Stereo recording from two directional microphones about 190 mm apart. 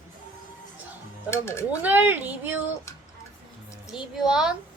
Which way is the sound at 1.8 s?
10° right (ahead or behind).